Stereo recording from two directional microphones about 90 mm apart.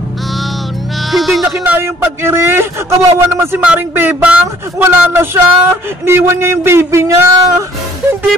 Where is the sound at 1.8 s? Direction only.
30° right (ahead or behind).